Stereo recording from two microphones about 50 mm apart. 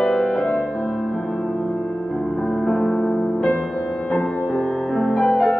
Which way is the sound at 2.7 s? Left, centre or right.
Centre.